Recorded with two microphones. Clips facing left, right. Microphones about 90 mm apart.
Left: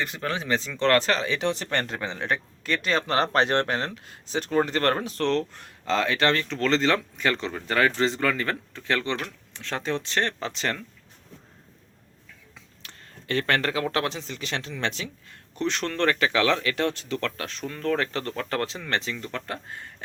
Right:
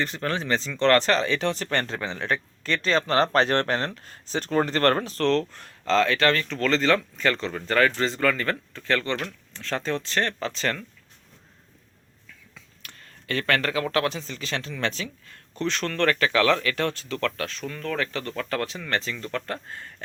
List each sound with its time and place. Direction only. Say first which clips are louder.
0.0 s speech: right 2 dB; 10° left (ahead or behind)
12.5 s speech: right 1 dB; 25° left (ahead or behind)